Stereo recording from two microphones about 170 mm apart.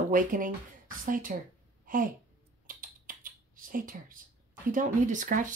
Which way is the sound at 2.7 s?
55° right (ahead or behind).